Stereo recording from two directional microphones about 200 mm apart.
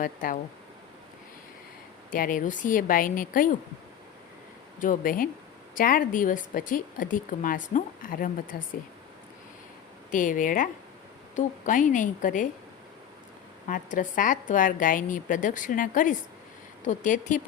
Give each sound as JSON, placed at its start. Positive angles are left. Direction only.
{"t": 0.0, "sound": "speech", "side_deg": 45}
{"t": 2.0, "sound": "speech", "side_deg": 45}
{"t": 4.8, "sound": "speech", "side_deg": 40}
{"t": 10.1, "sound": "a woman's voice", "side_deg": 40}
{"t": 13.7, "sound": "a woman's voice", "side_deg": 40}